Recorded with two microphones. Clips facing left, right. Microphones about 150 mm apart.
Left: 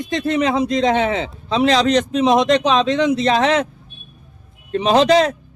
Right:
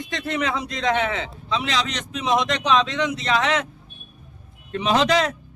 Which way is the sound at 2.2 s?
25° left (ahead or behind).